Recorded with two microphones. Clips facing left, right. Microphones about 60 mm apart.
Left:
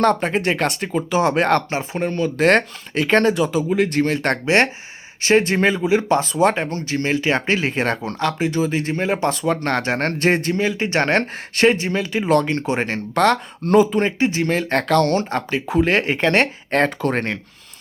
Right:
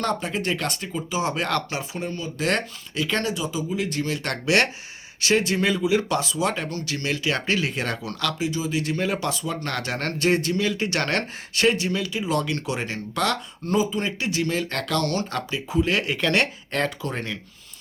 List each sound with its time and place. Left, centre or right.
0.0 s speech: left
2.0 s speech: left
4.4 s speech: left
8.4 s speech: left
8.8 s speech: left
9.3 s speech: left
12.5 s speech: left
14.0 s speech: left
15.5 s speech: left
17.0 s speech: left